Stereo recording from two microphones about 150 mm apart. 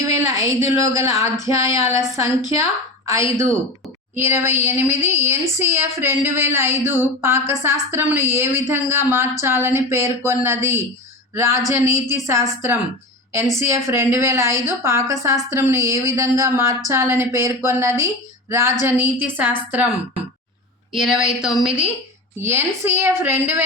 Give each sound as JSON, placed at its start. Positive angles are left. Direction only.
{"t": 0.0, "sound": "a woman's voice", "side_deg": -20}
{"t": 22.4, "sound": "speech", "side_deg": -15}